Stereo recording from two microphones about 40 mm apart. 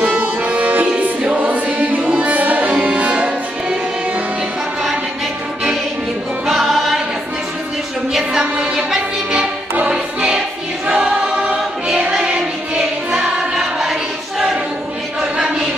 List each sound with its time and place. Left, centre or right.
0.0 s music: right
1.2 s choir: right
2.0 s music: right
2.7 s music: right
6.4 s choir: centre
8.1 s a sound: centre
8.4 s music: centre
9.8 s music: right
10.9 s choir: right
11.2 s choir: centre
13.6 s choir: centre